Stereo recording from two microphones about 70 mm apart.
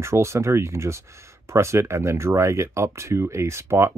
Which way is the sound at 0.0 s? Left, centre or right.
Right.